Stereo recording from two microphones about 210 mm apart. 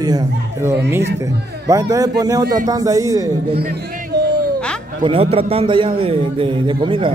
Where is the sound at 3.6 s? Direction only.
50° right (ahead or behind).